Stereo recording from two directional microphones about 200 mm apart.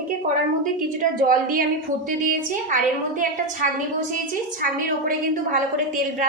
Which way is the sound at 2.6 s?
40° right (ahead or behind).